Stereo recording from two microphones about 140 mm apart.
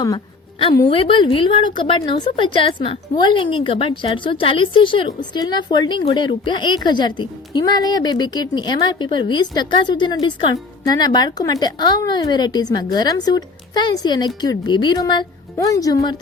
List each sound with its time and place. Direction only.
0.9 s a woman's voice: 40° left (ahead or behind)